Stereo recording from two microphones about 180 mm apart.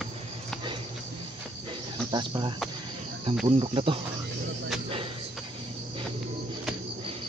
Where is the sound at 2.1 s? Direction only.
25° right (ahead or behind).